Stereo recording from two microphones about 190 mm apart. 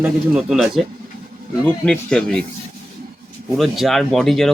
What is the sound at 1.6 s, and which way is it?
Speech, 5° left (ahead or behind).